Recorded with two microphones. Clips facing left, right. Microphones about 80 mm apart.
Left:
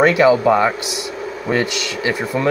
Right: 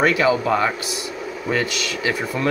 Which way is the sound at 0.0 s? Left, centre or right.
Left.